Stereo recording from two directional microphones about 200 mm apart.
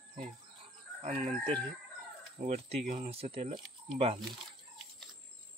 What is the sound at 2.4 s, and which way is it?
Speech, 30° right (ahead or behind).